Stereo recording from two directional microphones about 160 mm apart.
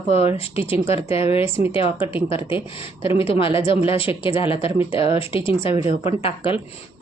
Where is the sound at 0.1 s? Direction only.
40° left (ahead or behind).